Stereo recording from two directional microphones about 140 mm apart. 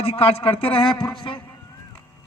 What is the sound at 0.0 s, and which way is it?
Speech, 45° left (ahead or behind).